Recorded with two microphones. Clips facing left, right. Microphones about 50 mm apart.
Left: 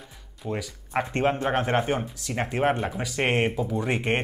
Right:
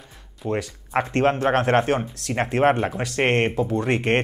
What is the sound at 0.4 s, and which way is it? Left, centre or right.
Speech, centre.